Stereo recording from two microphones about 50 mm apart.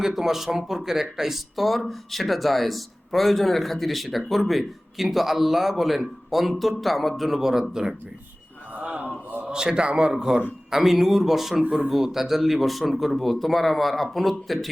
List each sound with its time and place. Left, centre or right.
0.0 s a man's voice: centre
8.7 s a sound: right
9.4 s a man's voice: centre